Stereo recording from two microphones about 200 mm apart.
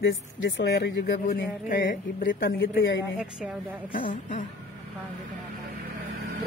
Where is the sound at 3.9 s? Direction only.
40° left (ahead or behind).